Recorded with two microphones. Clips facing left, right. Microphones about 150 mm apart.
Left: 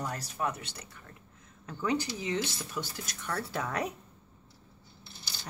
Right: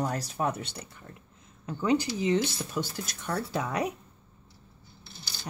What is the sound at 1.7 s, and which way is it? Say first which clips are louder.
Speech: right 5 dB; 20° right (ahead or behind).